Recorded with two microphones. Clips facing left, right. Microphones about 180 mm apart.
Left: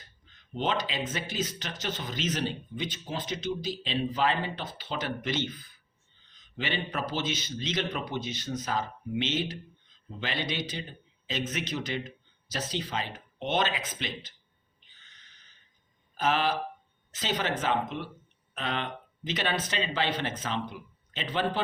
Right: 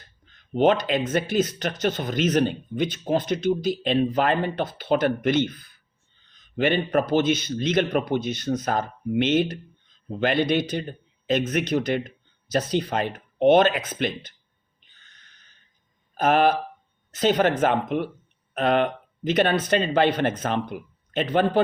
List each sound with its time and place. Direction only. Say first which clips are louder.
0.3 s speech: right 11 dB; 55° right (ahead or behind)
14.8 s owl: right 3 dB; 50° right (ahead or behind)
16.1 s speech: right 8 dB; 55° right (ahead or behind)